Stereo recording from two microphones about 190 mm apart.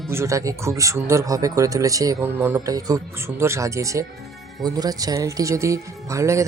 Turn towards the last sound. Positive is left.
turn(degrees=-15)  # may be behind; listen again after turning